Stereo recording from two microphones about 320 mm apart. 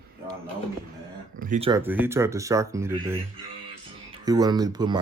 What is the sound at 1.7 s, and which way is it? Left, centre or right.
Speech, centre.